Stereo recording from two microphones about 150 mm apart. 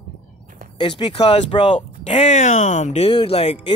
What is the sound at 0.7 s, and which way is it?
Speech, 35° left (ahead or behind).